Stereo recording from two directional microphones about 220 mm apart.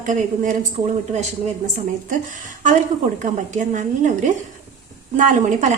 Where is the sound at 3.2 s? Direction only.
35° right (ahead or behind).